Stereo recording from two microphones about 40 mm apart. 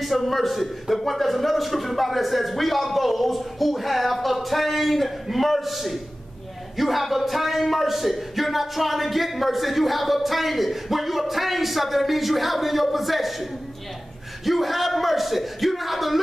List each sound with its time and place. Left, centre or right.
0.0 s speech: centre